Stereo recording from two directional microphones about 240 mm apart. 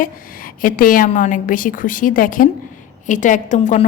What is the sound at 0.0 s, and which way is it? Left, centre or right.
A woman's voice, left.